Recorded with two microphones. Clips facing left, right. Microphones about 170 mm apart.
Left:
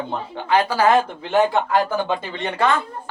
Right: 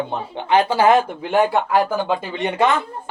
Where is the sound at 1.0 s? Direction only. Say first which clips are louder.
Right 1 dB; 10° right (ahead or behind).